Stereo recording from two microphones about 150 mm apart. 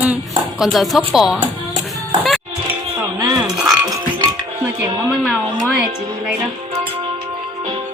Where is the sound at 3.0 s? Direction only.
25° right (ahead or behind).